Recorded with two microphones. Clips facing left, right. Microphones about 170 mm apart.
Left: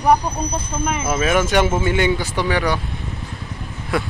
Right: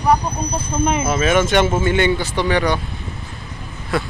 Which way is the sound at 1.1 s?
Centre (ahead or behind).